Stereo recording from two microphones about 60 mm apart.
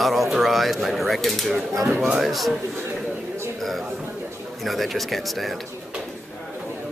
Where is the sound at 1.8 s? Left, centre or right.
Centre.